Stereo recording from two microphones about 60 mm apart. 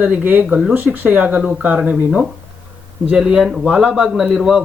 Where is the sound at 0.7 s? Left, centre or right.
Right.